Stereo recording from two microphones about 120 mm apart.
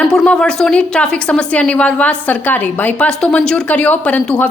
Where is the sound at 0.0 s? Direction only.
5° left (ahead or behind).